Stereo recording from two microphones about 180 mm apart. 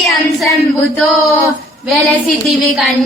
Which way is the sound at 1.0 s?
Centre (ahead or behind).